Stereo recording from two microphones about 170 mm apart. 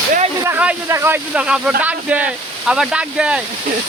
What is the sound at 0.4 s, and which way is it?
Speech, 10° right (ahead or behind).